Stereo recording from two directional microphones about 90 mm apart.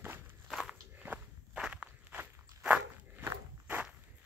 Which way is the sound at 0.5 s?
Centre (ahead or behind).